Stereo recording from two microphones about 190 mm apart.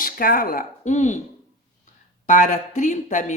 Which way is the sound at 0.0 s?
50° left (ahead or behind).